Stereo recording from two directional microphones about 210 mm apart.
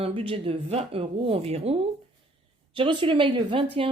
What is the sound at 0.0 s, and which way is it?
Speech, 25° right (ahead or behind).